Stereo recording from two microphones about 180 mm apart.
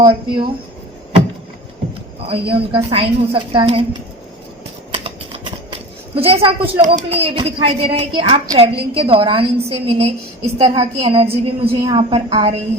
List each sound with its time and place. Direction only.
0.0 s a woman's voice: 30° right (ahead or behind)
2.2 s a woman's voice: 30° right (ahead or behind)
6.1 s a woman's voice: 35° right (ahead or behind)